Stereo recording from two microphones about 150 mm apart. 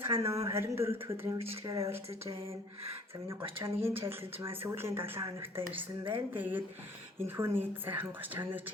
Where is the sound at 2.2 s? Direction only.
40° right (ahead or behind).